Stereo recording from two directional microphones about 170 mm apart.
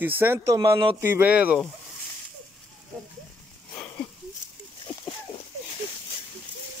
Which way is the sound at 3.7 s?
10° left (ahead or behind).